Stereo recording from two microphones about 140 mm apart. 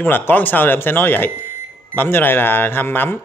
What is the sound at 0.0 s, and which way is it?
Speech, 15° left (ahead or behind).